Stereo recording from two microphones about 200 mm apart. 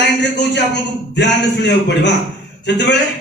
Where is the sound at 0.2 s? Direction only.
60° left (ahead or behind).